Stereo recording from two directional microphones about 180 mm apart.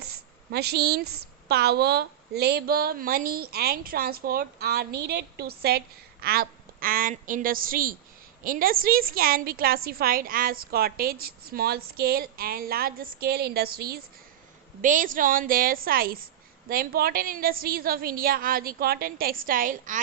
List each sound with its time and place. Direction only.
0.0 s a sound: 65° right (ahead or behind)
1.5 s a woman's voice: 65° right (ahead or behind)
14.8 s a woman's voice: 45° right (ahead or behind)